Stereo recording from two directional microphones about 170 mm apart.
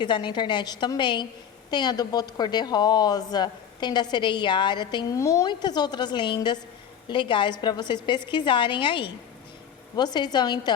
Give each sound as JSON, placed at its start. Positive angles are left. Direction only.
{"t": 0.0, "sound": "a woman's voice", "side_deg": 30}